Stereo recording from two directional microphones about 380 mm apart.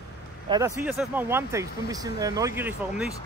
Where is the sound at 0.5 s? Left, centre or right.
Centre.